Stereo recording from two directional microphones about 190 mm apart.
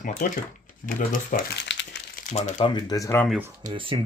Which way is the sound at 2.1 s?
40° left (ahead or behind).